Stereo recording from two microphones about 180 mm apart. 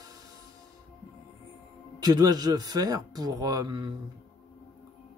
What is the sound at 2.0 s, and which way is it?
Speech, 20° right (ahead or behind).